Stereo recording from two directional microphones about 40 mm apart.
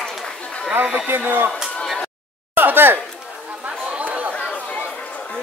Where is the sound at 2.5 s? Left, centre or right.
Right.